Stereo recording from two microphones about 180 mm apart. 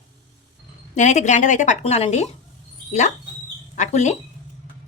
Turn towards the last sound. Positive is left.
turn(degrees=40)  # may be behind; listen again after turning